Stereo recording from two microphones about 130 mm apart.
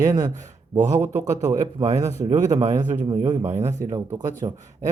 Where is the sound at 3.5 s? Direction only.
20° right (ahead or behind).